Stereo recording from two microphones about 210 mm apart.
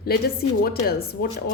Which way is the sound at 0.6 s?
45° left (ahead or behind).